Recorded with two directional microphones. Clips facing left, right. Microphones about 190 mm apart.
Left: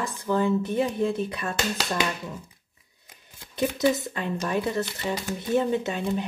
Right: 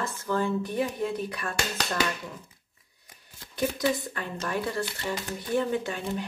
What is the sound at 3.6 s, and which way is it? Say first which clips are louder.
Speech: left 4 dB; 20° left (ahead or behind).